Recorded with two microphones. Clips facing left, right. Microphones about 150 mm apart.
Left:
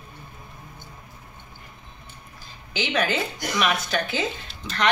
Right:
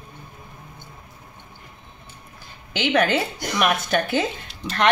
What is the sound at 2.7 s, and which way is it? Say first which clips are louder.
Speech: right 5 dB; 60° right (ahead or behind).